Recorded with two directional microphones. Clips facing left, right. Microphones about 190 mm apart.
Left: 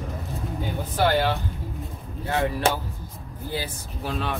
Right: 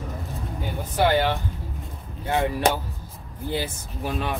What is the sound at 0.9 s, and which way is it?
Speech, 15° right (ahead or behind).